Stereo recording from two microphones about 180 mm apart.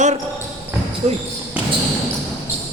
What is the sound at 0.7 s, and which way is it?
Basketball bounce, 15° right (ahead or behind).